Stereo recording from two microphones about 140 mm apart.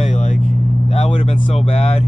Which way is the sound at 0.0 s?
55° left (ahead or behind).